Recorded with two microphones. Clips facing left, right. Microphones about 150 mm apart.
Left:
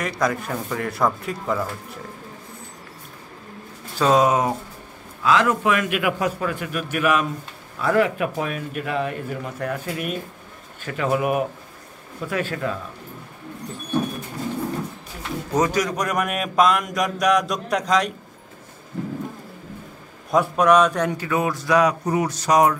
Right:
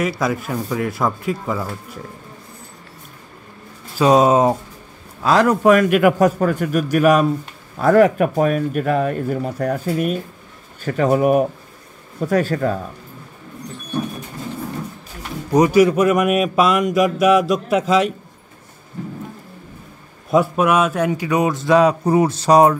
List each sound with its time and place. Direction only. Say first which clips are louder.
0.0 s speech: right 3 dB; 5° right (ahead or behind)
4.0 s speech: right 5 dB; 20° right (ahead or behind)
5.2 s speech: right 5 dB; 40° right (ahead or behind)
15.5 s speech: right 9 dB; 10° right (ahead or behind)
20.2 s speech: right 1 dB; 5° right (ahead or behind); by 22.8 s 30° right (ahead or behind)